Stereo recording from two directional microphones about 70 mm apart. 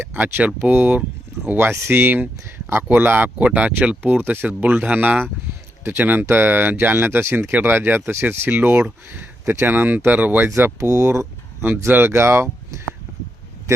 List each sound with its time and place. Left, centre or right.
0.0 s speech: right
0.4 s speech: centre
1.7 s speech: right
2.0 s speech: right
10.8 s speech: right
11.9 s speech: right
12.7 s speech: right